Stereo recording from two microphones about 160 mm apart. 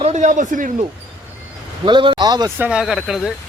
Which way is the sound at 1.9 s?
30° right (ahead or behind).